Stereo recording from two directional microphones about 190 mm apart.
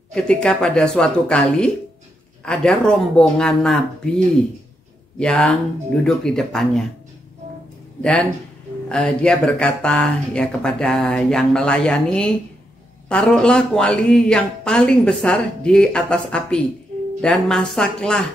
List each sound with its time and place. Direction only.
0.1 s speech: 5° left (ahead or behind)
5.2 s speech: 5° left (ahead or behind)
8.0 s speech: 5° left (ahead or behind)